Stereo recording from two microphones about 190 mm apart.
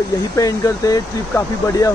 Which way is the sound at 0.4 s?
20° left (ahead or behind).